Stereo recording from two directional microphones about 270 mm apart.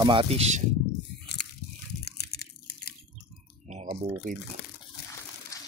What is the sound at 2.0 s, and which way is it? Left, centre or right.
Biting, left.